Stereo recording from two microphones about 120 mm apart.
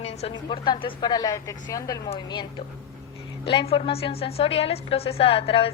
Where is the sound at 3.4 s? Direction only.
50° left (ahead or behind).